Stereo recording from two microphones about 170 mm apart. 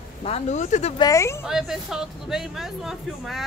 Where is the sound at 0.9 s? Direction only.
20° left (ahead or behind).